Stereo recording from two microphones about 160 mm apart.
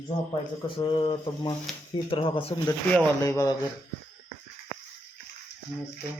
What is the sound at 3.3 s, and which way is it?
Speech, 20° left (ahead or behind).